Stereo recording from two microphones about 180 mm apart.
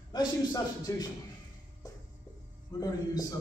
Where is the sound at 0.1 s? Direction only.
20° left (ahead or behind).